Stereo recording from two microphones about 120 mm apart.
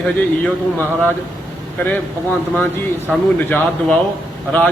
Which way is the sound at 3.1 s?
10° left (ahead or behind).